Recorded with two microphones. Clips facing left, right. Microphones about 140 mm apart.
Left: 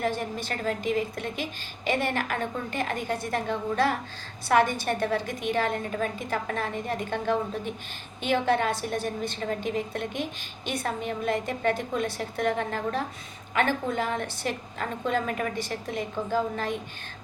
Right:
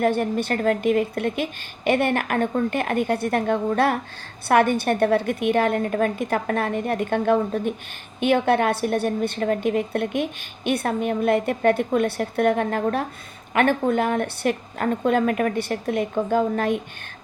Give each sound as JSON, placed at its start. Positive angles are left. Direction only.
{"t": 0.0, "sound": "a woman's voice", "side_deg": -60}